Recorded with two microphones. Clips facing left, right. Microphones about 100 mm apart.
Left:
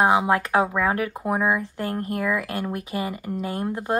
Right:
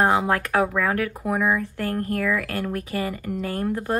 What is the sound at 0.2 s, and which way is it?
Speech, 20° left (ahead or behind).